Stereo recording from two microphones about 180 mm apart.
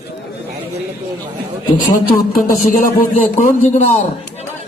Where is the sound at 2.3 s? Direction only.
50° left (ahead or behind).